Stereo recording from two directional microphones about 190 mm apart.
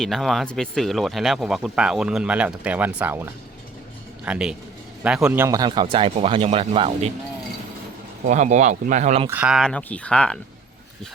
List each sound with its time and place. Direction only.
0.0 s speech: centre (ahead or behind)
4.3 s a man's voice: 5° right (ahead or behind); by 7.1 s 30° right (ahead or behind)
8.3 s speech: 40° right (ahead or behind)
9.3 s speech: 5° right (ahead or behind)